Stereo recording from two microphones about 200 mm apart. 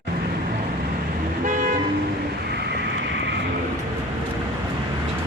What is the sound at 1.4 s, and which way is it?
Vehicle, 40° right (ahead or behind).